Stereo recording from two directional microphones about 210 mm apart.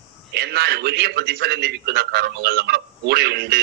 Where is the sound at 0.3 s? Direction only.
50° right (ahead or behind).